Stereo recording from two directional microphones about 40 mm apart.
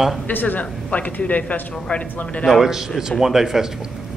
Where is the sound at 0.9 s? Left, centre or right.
Left.